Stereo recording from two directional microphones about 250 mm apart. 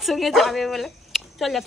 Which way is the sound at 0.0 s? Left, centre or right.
Centre.